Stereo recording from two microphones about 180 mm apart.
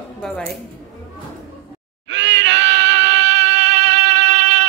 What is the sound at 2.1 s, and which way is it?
Music, 85° right.